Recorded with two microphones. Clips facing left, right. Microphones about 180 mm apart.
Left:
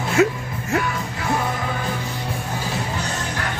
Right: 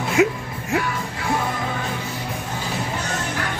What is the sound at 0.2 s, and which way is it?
Speech, 15° right (ahead or behind).